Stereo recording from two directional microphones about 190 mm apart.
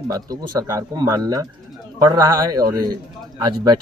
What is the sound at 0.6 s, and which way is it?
Speech, 20° right (ahead or behind).